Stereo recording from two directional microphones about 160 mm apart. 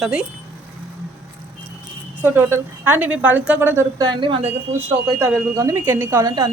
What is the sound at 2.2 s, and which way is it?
Speech, 15° right (ahead or behind).